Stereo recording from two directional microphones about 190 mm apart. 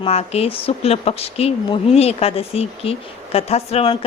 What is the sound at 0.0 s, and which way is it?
Speech, 35° left (ahead or behind).